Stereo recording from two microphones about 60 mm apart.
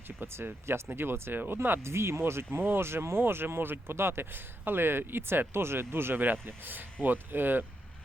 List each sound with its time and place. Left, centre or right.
0.2 s speech: right